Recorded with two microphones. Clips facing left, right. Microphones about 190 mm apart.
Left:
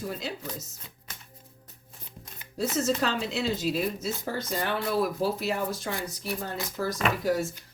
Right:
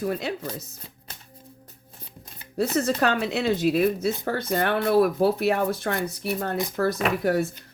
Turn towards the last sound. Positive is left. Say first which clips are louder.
# right 4 dB
turn(degrees=-60)  # may be behind; listen again after turning